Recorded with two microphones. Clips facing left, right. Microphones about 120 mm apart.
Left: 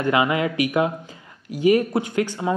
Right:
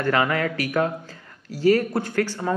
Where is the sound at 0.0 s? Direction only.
15° left (ahead or behind).